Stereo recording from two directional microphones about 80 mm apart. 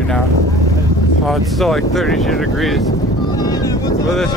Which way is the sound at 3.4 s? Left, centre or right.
Left.